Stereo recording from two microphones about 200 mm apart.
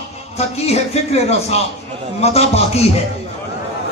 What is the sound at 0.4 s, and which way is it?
Speech, 30° left (ahead or behind).